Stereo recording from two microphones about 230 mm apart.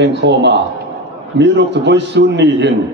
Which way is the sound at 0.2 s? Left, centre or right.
Right.